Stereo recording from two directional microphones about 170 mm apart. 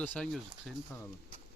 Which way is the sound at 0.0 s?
10° left (ahead or behind).